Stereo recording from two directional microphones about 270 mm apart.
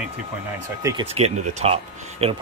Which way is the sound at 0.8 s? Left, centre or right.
Centre.